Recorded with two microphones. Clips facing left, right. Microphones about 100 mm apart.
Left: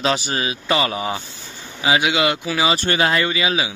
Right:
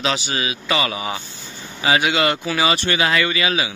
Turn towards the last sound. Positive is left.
turn(degrees=20)  # may be behind; listen again after turning